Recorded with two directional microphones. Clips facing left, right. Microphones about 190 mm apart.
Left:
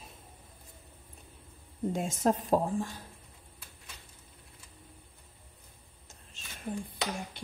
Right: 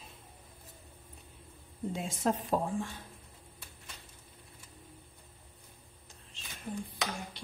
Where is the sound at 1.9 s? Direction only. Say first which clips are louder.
Left 3 dB; 45° left (ahead or behind).